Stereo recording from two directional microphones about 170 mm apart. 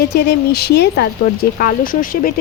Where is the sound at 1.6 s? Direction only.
55° left (ahead or behind).